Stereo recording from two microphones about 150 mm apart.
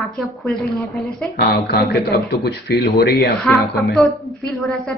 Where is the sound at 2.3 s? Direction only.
90° left.